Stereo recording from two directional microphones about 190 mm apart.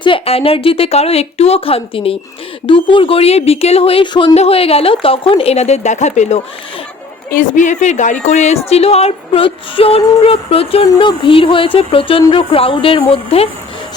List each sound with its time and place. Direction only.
0.0 s speech: 30° left (ahead or behind)